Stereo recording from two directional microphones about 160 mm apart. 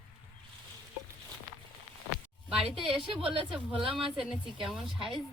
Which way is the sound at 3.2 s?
35° right (ahead or behind).